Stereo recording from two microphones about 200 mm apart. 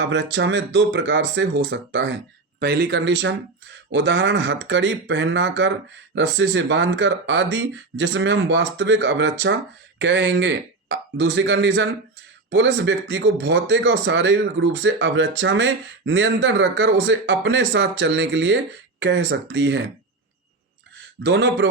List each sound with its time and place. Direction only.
0.0 s speech: 65° right (ahead or behind)
2.6 s speech: 55° right (ahead or behind)
21.2 s speech: 65° right (ahead or behind)